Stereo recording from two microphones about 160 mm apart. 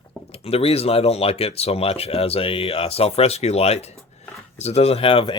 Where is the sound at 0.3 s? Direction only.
40° left (ahead or behind).